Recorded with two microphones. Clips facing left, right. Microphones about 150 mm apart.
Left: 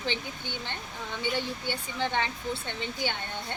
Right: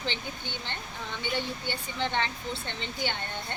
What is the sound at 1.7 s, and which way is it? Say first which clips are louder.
Speech: left 1 dB; 10° left (ahead or behind).